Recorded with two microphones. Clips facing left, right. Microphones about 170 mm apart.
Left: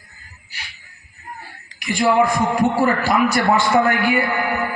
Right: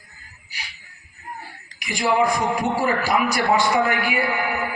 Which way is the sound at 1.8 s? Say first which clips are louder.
Left 4 dB; 50° left (ahead or behind).